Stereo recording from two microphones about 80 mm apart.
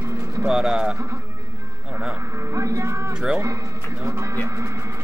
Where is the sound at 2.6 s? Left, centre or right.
Right.